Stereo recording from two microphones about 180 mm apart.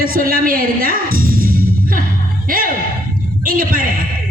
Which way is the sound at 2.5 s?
50° right (ahead or behind).